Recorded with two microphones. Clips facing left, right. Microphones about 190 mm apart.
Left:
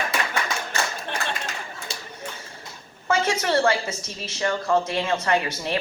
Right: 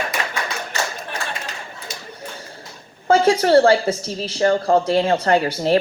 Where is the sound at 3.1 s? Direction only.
30° right (ahead or behind).